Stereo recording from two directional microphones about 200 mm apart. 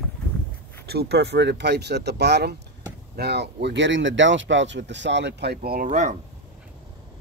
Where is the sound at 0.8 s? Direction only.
55° right (ahead or behind); by 6.1 s 40° right (ahead or behind).